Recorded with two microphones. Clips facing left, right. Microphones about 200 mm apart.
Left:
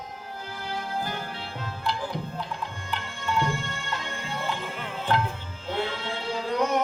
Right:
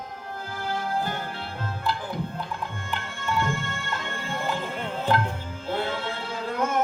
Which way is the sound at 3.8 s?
50° right (ahead or behind).